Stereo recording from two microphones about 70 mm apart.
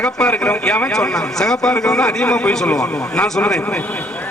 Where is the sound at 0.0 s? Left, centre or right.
Centre.